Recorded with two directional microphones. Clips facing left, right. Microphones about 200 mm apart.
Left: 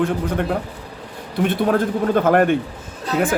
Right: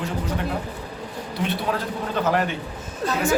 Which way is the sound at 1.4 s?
50° left (ahead or behind).